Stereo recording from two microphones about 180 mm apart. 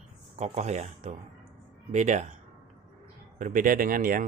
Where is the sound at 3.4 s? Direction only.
50° right (ahead or behind).